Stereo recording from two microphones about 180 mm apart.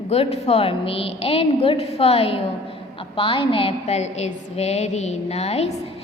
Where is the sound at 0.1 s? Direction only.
35° left (ahead or behind).